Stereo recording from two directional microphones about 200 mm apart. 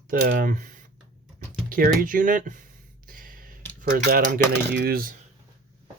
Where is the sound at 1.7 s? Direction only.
45° right (ahead or behind).